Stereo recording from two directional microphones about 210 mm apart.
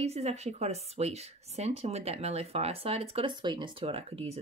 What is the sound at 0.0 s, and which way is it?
Speech, 30° right (ahead or behind).